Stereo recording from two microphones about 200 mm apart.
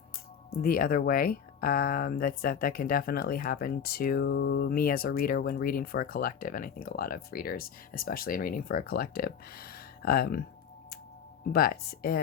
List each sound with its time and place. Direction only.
0.6 s speech: 45° left (ahead or behind)
11.4 s speech: 50° left (ahead or behind)